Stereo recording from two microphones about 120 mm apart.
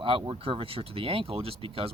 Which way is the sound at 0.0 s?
45° right (ahead or behind).